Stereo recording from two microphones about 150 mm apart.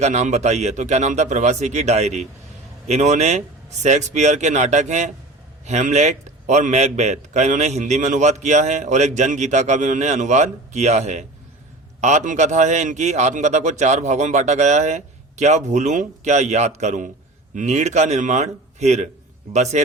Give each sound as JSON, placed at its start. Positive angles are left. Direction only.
{"t": 0.0, "sound": "a man's voice", "side_deg": -50}